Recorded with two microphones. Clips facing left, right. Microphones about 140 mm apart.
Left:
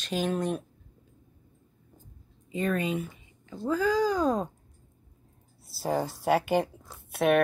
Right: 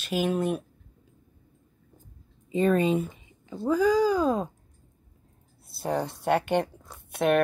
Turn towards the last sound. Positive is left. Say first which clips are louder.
# even
turn(degrees=0)  # may be behind; listen again after turning